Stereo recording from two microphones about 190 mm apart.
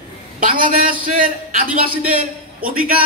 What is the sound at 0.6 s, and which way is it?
A man's voice, 45° right (ahead or behind).